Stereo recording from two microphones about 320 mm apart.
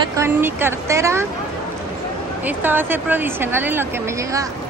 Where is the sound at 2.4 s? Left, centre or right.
Centre.